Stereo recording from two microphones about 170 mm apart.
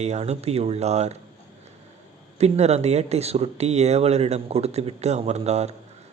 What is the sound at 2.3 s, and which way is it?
Speech, 40° right (ahead or behind).